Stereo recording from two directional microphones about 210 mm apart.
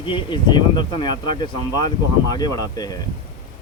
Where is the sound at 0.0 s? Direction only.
25° left (ahead or behind).